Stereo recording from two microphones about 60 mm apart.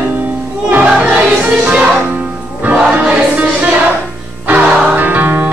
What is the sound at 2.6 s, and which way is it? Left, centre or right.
Music, right.